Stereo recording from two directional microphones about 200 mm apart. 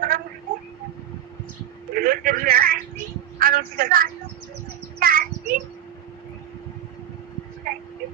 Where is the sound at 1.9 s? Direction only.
45° right (ahead or behind).